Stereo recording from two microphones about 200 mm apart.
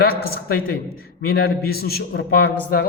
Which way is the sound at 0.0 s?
50° left (ahead or behind).